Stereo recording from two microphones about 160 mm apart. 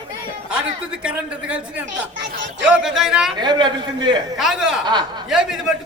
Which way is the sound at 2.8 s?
5° right (ahead or behind).